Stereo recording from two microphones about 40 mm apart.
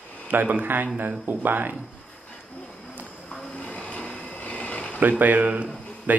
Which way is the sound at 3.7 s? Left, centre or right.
Left.